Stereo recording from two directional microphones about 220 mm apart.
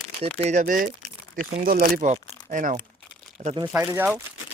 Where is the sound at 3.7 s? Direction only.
10° right (ahead or behind).